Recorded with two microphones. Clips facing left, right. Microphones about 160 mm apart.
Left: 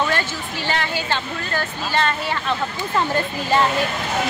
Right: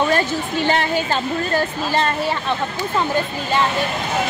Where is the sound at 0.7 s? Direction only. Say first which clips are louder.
Right 3 dB; 40° right (ahead or behind).